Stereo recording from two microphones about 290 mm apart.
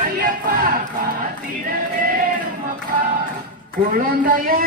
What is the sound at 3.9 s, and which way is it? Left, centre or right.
Speech, right.